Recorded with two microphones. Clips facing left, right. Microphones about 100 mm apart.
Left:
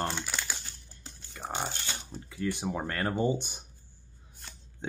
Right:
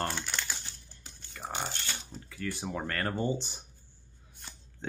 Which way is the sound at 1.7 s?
20° left (ahead or behind).